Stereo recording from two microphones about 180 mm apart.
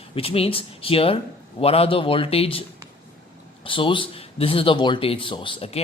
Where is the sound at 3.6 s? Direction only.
30° left (ahead or behind).